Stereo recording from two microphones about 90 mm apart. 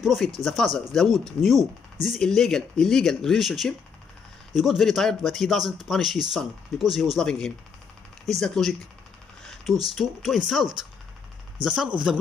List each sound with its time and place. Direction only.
0.0 s speech: centre (ahead or behind)
9.4 s a sound: 5° left (ahead or behind)
9.8 s speech: 5° right (ahead or behind)